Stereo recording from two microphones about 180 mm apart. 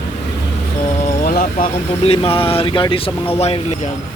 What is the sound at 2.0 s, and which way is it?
Speech, 30° left (ahead or behind).